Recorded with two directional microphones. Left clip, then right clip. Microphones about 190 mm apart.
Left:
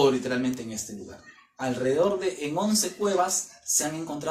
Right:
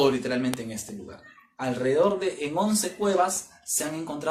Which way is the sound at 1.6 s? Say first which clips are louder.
Right 1 dB; 10° right (ahead or behind).